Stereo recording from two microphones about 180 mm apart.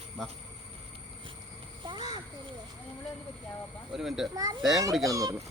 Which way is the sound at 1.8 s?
25° right (ahead or behind).